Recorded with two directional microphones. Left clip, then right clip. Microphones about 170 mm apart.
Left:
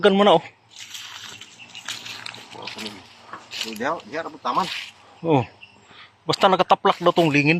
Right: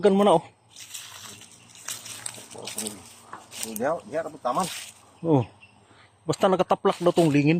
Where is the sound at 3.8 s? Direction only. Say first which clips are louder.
Right 1 dB; 65° right (ahead or behind).